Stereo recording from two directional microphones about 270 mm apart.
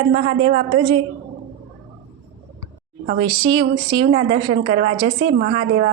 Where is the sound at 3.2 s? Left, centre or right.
Centre.